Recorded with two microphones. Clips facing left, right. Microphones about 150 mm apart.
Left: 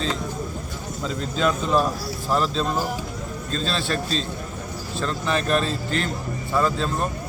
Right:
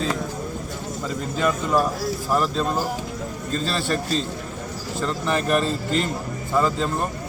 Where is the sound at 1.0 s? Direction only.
5° right (ahead or behind).